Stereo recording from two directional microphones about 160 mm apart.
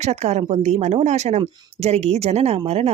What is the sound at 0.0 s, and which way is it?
A woman's voice, 45° right (ahead or behind).